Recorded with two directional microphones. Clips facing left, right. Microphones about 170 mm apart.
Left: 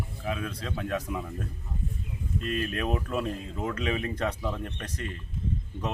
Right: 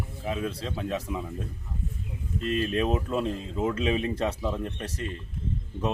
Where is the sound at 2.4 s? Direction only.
30° right (ahead or behind).